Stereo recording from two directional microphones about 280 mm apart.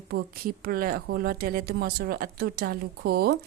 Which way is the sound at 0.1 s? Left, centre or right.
Right.